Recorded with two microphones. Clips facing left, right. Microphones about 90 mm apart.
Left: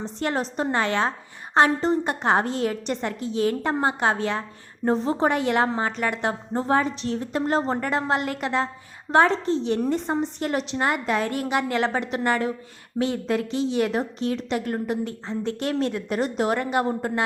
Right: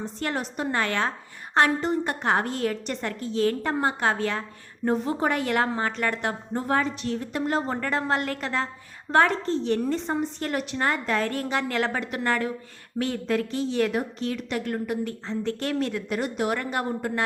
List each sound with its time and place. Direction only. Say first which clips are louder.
0.0 s a woman's voice: left 3 dB; 25° left (ahead or behind)
7.8 s a woman's voice: left 2 dB; 20° left (ahead or behind)